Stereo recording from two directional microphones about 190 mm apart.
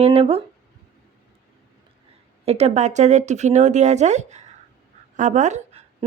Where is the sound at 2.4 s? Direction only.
35° right (ahead or behind).